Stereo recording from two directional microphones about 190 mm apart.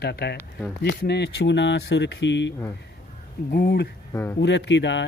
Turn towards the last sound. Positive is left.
turn(degrees=70)  # may be behind; listen again after turning